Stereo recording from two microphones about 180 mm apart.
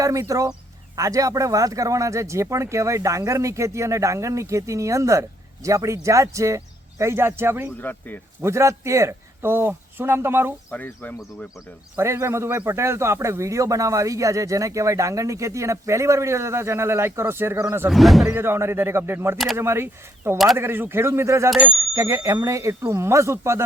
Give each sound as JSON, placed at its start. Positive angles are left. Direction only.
{"t": 0.0, "sound": "a man's voice", "side_deg": -20}
{"t": 7.8, "sound": "speech", "side_deg": 10}
{"t": 8.4, "sound": "a man's voice", "side_deg": -15}
{"t": 10.7, "sound": "speech", "side_deg": 10}
{"t": 11.2, "sound": "speech", "side_deg": 0}
{"t": 11.9, "sound": "a man's voice", "side_deg": -15}
{"t": 17.8, "sound": "speech", "side_deg": 0}
{"t": 18.3, "sound": "a man's voice", "side_deg": -15}